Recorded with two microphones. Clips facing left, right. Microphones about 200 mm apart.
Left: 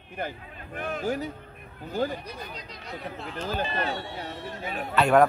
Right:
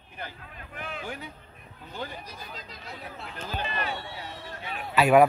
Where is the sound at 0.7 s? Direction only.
40° left (ahead or behind).